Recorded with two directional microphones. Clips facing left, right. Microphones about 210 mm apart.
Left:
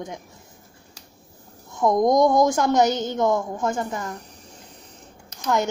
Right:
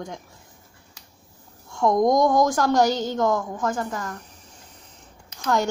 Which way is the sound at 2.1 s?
25° left (ahead or behind).